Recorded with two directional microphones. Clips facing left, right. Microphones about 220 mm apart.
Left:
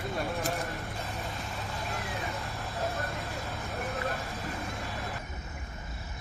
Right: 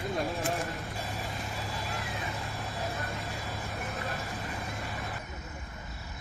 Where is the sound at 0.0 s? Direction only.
Centre (ahead or behind).